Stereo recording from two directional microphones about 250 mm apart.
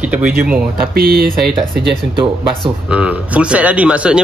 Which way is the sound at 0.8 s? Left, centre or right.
Right.